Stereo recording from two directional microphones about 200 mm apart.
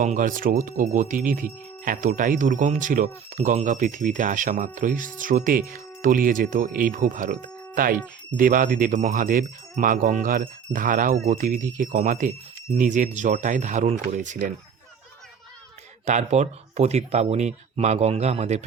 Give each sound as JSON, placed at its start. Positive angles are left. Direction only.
{"t": 0.0, "sound": "speech", "side_deg": -40}
{"t": 8.4, "sound": "speech", "side_deg": -40}
{"t": 16.0, "sound": "speech", "side_deg": -35}